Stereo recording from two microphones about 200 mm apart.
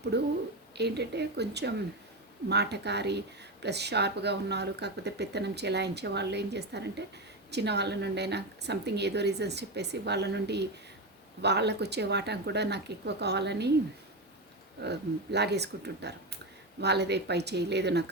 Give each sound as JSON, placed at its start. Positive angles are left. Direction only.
{"t": 0.1, "sound": "speech", "side_deg": -55}
{"t": 14.8, "sound": "speech", "side_deg": -55}